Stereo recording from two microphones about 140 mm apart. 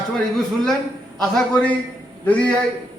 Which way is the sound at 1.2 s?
5° left (ahead or behind).